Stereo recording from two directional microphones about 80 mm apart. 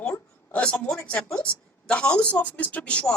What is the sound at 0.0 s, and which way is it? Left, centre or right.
A woman's voice, centre.